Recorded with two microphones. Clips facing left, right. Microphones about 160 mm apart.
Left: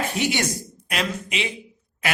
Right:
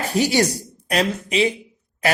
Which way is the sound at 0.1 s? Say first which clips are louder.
Right 6 dB; 35° right (ahead or behind).